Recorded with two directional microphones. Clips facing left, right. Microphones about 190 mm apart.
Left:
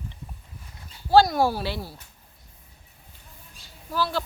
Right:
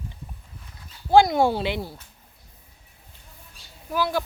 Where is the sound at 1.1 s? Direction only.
20° right (ahead or behind).